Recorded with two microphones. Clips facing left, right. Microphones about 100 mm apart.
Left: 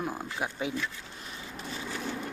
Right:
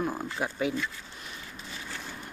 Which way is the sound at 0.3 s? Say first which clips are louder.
Right 3 dB; 10° left (ahead or behind).